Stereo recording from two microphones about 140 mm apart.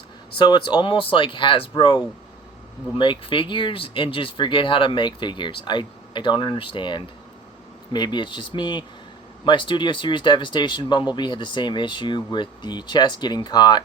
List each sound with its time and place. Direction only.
0.3 s speech: 35° left (ahead or behind)